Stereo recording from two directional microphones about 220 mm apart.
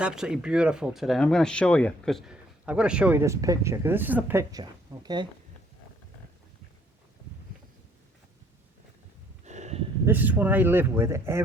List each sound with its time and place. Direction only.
0.0 s speech: 5° right (ahead or behind); by 5.3 s 20° right (ahead or behind)
9.4 s a sound: 30° right (ahead or behind)
10.1 s speech: 10° right (ahead or behind)